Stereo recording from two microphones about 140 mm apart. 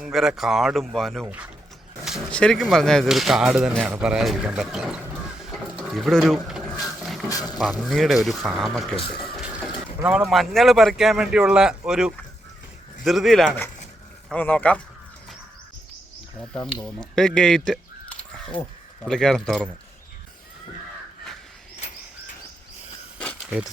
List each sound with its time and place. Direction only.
0.0 s speech: 5° right (ahead or behind)
1.2 s speech: 10° right (ahead or behind)
2.3 s speech: 5° left (ahead or behind)
5.4 s a sound: centre (ahead or behind)
7.6 s speech: centre (ahead or behind)
10.0 s speech: 5° right (ahead or behind); by 14.8 s 10° left (ahead or behind)
16.4 s speech: 5° left (ahead or behind)
17.2 s a sound: 5° left (ahead or behind)
19.0 s speech: 5° left (ahead or behind)